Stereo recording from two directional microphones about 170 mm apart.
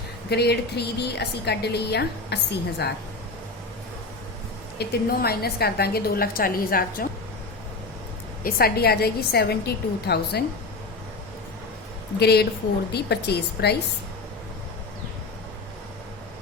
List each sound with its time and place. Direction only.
0.3 s a woman's voice: 75° left (ahead or behind)
4.8 s a woman's voice: 65° left (ahead or behind)
8.4 s a woman's voice: 65° left (ahead or behind)
12.2 s a woman's voice: 75° left (ahead or behind)